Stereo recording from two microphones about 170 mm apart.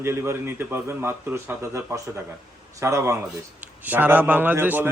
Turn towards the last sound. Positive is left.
turn(degrees=-10)  # may be behind; listen again after turning